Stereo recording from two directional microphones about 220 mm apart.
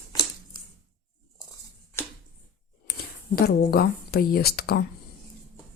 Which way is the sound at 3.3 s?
45° left (ahead or behind).